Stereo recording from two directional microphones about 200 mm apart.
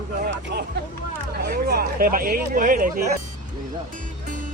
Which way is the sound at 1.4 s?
50° right (ahead or behind).